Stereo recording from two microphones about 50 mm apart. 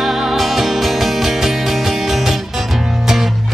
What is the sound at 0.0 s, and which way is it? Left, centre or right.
Music, centre.